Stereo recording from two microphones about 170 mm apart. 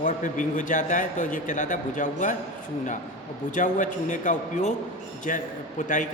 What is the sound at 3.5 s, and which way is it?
A man's voice, 50° left (ahead or behind).